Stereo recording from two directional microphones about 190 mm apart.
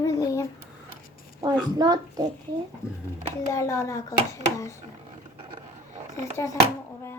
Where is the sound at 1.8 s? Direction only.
20° right (ahead or behind).